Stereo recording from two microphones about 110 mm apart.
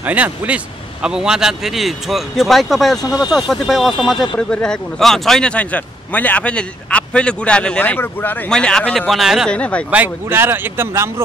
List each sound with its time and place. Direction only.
0.0 s a man's voice: 15° right (ahead or behind); by 9.1 s 10° left (ahead or behind)
9.1 s speech: 5° right (ahead or behind)
9.5 s speech: 10° left (ahead or behind)
9.8 s speech: 15° right (ahead or behind)